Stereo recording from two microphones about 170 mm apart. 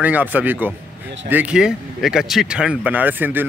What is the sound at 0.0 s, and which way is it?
Speech, 10° right (ahead or behind).